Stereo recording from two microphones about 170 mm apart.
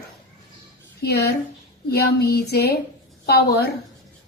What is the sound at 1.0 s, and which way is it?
Speech, 75° left (ahead or behind).